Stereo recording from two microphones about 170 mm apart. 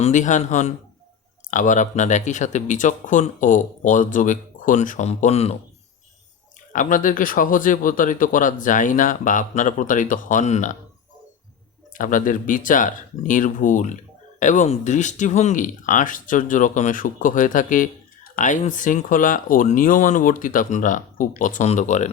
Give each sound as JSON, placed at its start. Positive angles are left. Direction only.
{"t": 0.0, "sound": "speech", "side_deg": 45}
{"t": 6.7, "sound": "speech", "side_deg": 50}
{"t": 11.9, "sound": "speech", "side_deg": 50}